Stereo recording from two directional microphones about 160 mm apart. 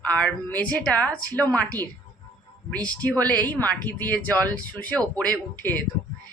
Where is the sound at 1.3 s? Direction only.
25° right (ahead or behind).